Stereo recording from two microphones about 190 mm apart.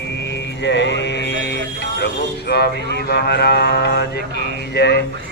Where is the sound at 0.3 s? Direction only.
65° left (ahead or behind).